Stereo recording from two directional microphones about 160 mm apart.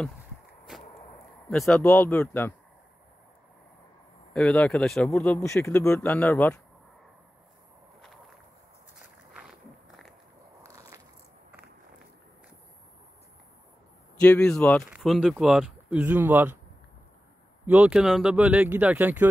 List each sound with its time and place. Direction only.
1.5 s speech: 5° left (ahead or behind)
4.3 s speech: 5° left (ahead or behind)
9.4 s walk: centre (ahead or behind)
10.6 s biting: 20° right (ahead or behind)
14.2 s speech: 5° left (ahead or behind); by 16.5 s 10° right (ahead or behind)
17.6 s speech: 10° right (ahead or behind)